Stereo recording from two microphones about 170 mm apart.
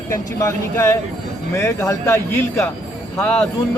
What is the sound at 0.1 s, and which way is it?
A man's voice, 15° left (ahead or behind).